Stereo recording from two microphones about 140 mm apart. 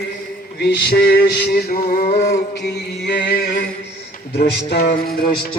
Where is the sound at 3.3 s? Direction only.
90° left.